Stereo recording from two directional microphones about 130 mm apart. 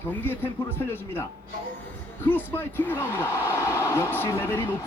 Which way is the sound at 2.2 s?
15° left (ahead or behind).